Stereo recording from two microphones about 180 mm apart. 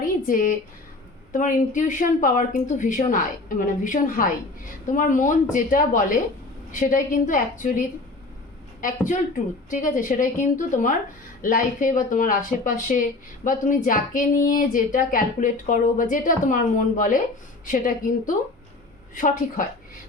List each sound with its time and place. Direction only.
0.0 s a sound: 50° left (ahead or behind)
1.3 s speech: 45° left (ahead or behind)
9.6 s speech: 45° left (ahead or behind)